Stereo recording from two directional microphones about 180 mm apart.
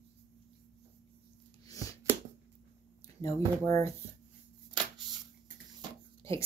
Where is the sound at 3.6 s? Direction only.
15° left (ahead or behind).